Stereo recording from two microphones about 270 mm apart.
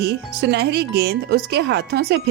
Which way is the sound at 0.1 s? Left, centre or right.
Right.